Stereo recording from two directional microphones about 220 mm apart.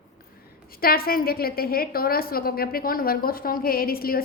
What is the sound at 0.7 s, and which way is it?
A woman's voice, 45° left (ahead or behind).